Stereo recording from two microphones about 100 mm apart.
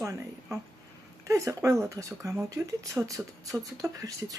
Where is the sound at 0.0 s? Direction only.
30° right (ahead or behind).